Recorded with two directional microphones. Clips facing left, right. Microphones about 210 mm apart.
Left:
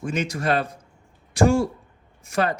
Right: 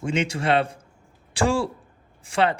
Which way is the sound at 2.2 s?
30° right (ahead or behind).